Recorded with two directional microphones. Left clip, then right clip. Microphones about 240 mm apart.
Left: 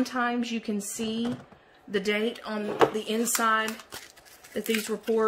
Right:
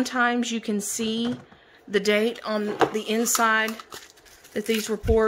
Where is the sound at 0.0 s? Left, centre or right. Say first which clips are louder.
Right 5 dB; centre.